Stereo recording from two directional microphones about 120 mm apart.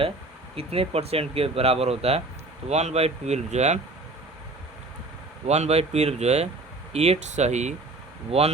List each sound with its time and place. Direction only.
0.5 s speech: 55° right (ahead or behind); by 3.8 s 70° right (ahead or behind)
5.5 s speech: 65° right (ahead or behind)
8.3 s speech: 55° right (ahead or behind)